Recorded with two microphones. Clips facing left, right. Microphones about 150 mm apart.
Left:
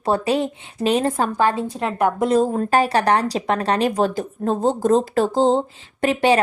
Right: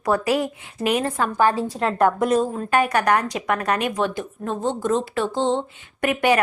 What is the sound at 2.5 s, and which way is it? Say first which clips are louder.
Speech: left 3 dB; 40° left (ahead or behind).